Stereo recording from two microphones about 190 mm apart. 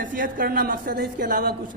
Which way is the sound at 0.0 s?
45° right (ahead or behind).